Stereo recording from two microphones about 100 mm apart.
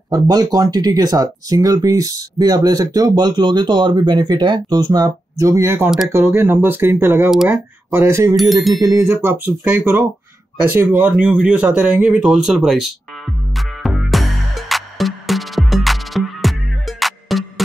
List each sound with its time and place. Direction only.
0.1 s speech: 40° right (ahead or behind); by 12.9 s centre (ahead or behind)
13.6 s music: centre (ahead or behind)